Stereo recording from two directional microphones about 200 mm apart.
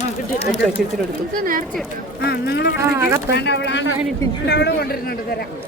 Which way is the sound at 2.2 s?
55° left (ahead or behind).